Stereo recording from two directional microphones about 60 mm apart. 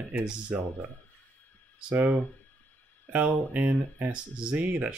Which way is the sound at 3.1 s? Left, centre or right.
Right.